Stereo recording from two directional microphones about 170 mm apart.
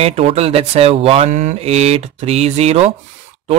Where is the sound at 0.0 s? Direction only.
35° right (ahead or behind).